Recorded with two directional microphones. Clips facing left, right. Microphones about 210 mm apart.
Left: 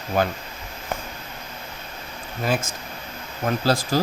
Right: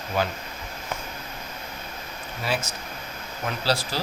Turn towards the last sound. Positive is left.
turn(degrees=45)  # may be behind; listen again after turning